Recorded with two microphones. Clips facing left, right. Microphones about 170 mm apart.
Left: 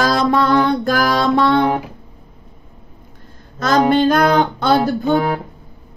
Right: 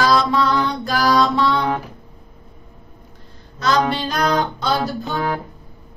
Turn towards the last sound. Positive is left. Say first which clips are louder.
# left 7 dB
turn(degrees=55)  # may be behind; listen again after turning